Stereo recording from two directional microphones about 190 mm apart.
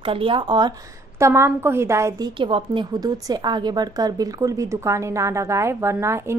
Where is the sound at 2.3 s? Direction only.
25° right (ahead or behind).